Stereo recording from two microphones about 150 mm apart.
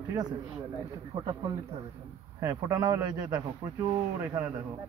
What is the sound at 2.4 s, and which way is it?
A man's voice, 25° right (ahead or behind).